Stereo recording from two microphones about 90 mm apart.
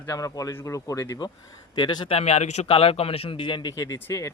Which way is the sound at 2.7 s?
90° left.